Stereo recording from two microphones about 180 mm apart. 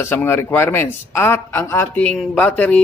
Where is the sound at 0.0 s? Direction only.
10° left (ahead or behind).